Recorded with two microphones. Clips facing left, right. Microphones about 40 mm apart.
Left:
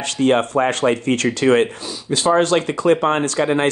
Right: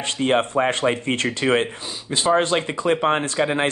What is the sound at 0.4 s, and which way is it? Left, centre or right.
Speech, right.